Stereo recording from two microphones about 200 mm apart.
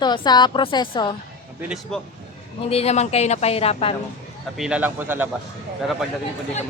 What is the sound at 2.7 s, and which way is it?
Speech, 30° left (ahead or behind).